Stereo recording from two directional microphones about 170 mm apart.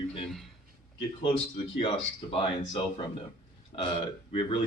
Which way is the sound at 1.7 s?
30° left (ahead or behind).